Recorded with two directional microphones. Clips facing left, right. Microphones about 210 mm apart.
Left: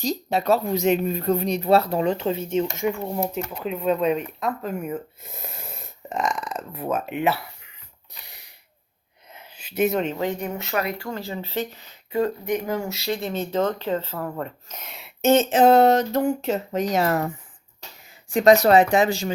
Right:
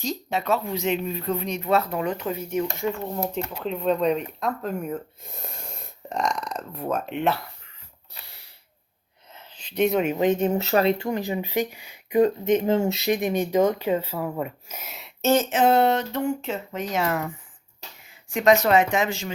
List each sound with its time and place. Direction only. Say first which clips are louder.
0.0 s speech: left 4 dB; 35° left (ahead or behind)
2.7 s speech: left 2 dB; 15° left (ahead or behind)
8.2 s a sound: left 1 dB; 15° left (ahead or behind)
10.0 s speech: right 4 dB; 15° right (ahead or behind)
10.6 s speech: right 5 dB; 35° right (ahead or behind)
10.8 s speech: right 6 dB; 20° right (ahead or behind); by 15.1 s centre (ahead or behind)
15.2 s speech: left 3 dB; 20° left (ahead or behind)
15.4 s speech: left 4 dB; 40° left (ahead or behind)